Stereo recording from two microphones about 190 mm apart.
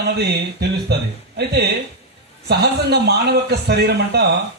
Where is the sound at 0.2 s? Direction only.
60° right (ahead or behind).